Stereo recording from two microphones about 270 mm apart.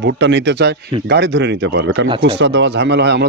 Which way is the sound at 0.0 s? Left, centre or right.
Right.